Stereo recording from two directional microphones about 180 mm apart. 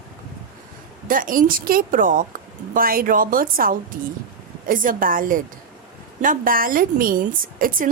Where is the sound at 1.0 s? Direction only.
50° right (ahead or behind).